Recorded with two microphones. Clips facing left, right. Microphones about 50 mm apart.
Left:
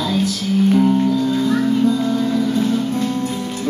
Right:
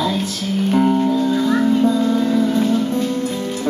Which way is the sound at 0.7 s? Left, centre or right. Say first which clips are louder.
Right 2 dB; centre.